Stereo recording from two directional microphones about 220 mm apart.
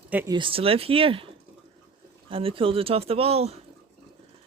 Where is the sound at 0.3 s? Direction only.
25° right (ahead or behind).